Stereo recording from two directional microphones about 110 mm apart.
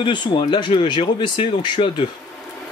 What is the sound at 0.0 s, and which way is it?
Speech, 50° left (ahead or behind).